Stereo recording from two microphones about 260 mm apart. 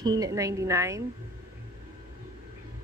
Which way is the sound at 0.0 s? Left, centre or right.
Centre.